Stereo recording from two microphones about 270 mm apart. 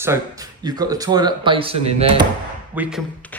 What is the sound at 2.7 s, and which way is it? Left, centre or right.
Speech, centre.